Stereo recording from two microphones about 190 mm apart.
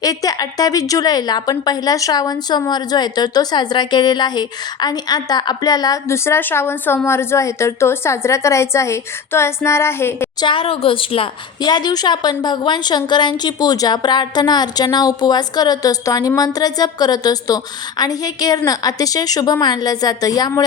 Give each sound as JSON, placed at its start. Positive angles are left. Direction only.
{"t": 0.0, "sound": "a woman's voice", "side_deg": 20}
{"t": 10.4, "sound": "a woman's voice", "side_deg": 30}